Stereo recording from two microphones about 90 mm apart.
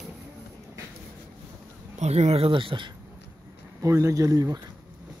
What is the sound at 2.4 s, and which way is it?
Speech, 85° right.